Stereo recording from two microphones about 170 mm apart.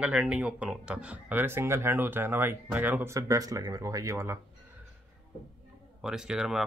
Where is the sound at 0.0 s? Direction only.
5° right (ahead or behind).